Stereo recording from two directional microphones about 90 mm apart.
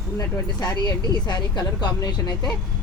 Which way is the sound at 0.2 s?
50° left (ahead or behind).